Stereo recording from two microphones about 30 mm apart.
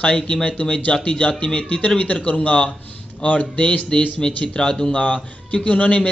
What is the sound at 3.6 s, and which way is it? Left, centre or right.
Speech, left.